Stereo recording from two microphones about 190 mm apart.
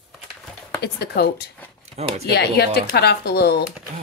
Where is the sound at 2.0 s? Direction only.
35° right (ahead or behind).